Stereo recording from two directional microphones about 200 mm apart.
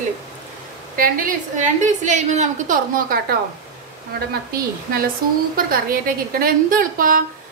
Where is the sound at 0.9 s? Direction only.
45° right (ahead or behind).